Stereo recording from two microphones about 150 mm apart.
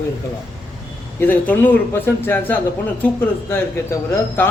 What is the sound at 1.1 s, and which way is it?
A man's voice, 15° left (ahead or behind).